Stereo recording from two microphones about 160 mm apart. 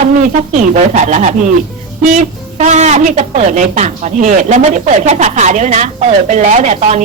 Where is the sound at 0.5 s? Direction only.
50° right (ahead or behind).